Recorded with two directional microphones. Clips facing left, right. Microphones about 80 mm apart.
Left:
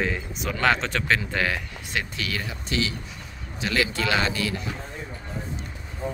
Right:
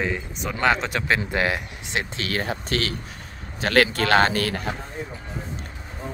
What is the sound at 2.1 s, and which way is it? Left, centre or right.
Speech, right.